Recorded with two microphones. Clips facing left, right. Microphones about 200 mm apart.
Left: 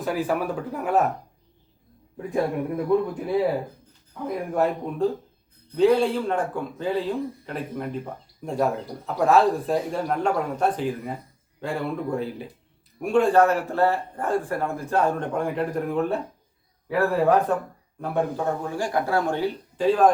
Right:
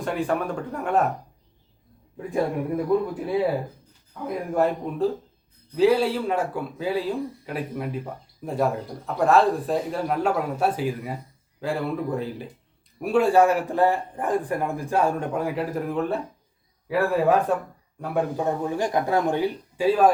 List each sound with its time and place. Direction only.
0.0 s speech: 5° left (ahead or behind)
2.3 s speech: centre (ahead or behind)
4.5 s a man's voice: centre (ahead or behind)